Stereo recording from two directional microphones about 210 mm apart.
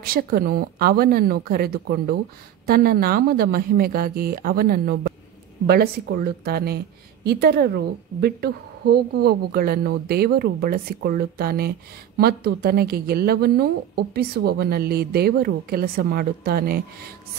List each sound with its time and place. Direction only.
0.0 s a woman's voice: 45° right (ahead or behind)